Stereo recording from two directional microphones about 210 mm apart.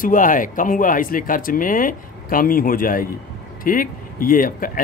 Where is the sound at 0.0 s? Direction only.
40° left (ahead or behind).